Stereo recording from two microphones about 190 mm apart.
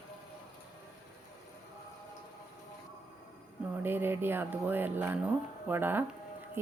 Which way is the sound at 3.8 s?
10° right (ahead or behind).